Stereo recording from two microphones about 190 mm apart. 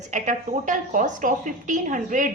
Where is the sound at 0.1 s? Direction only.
40° right (ahead or behind).